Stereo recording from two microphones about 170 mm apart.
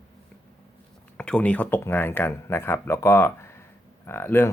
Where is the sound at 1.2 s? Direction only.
5° left (ahead or behind).